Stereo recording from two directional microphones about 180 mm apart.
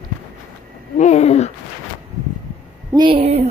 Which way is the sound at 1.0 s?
40° left (ahead or behind).